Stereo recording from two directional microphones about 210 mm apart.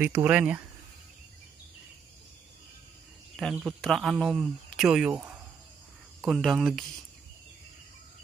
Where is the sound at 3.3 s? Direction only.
Centre (ahead or behind).